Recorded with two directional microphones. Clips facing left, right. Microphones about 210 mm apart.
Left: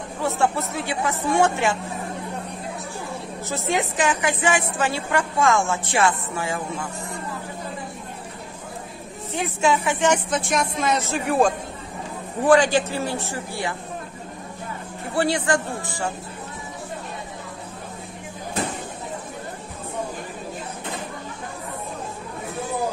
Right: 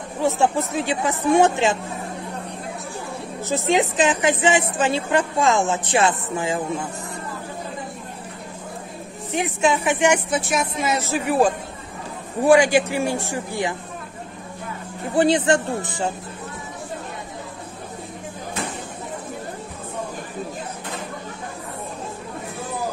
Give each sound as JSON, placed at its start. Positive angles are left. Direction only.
{"t": 0.4, "sound": "speech", "side_deg": -15}
{"t": 3.4, "sound": "a woman's voice", "side_deg": -15}
{"t": 9.3, "sound": "speech", "side_deg": -15}
{"t": 15.1, "sound": "a woman's voice", "side_deg": -20}